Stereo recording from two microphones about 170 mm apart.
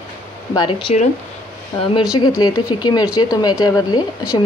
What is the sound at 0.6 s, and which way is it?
Speech, 30° left (ahead or behind).